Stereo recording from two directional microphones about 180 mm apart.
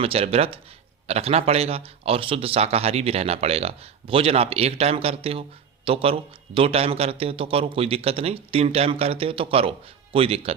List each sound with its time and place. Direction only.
0.0 s speech: 35° right (ahead or behind)